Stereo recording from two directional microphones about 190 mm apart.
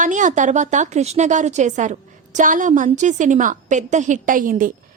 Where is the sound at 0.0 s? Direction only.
40° right (ahead or behind).